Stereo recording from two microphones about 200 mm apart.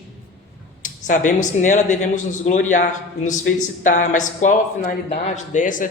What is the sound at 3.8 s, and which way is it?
A man's voice, 40° left (ahead or behind).